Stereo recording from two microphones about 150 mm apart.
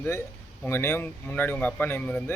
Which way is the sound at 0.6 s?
15° left (ahead or behind).